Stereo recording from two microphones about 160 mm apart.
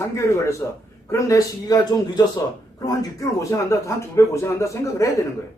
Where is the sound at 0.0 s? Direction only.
20° left (ahead or behind).